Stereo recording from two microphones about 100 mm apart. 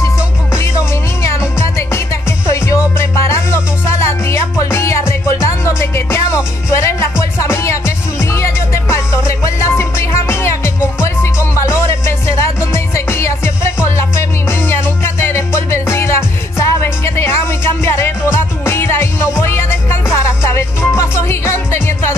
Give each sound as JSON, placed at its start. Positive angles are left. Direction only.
{"t": 1.6, "sound": "music", "side_deg": 25}